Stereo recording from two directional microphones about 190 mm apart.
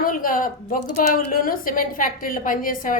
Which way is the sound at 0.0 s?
45° left (ahead or behind).